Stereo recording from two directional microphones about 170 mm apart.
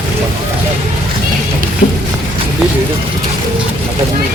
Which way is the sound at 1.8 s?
65° left (ahead or behind).